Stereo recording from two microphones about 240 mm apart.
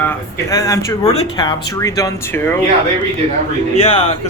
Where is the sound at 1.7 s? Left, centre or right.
Centre.